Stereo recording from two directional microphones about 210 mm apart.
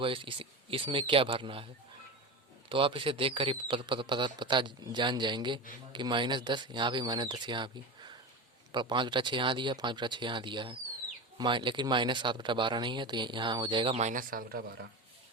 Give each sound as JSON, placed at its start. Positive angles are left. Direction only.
{"t": 0.0, "sound": "speech", "side_deg": -25}
{"t": 2.6, "sound": "speech", "side_deg": -25}